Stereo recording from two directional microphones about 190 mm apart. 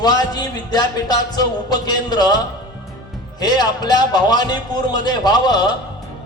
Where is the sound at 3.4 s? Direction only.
20° left (ahead or behind).